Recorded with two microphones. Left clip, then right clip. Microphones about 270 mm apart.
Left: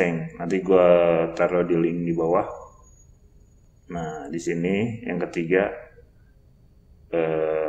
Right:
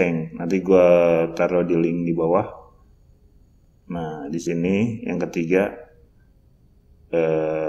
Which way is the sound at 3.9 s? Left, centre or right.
Right.